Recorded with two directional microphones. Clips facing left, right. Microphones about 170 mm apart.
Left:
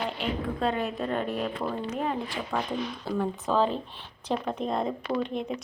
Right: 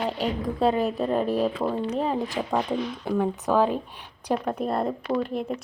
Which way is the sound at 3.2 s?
10° right (ahead or behind).